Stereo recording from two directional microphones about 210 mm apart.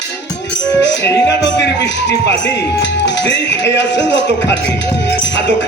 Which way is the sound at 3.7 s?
55° left (ahead or behind).